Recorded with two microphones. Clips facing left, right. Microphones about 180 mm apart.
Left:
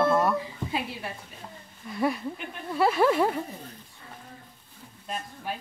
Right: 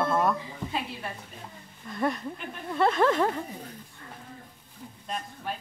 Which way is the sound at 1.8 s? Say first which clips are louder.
Left 2 dB; 5° left (ahead or behind).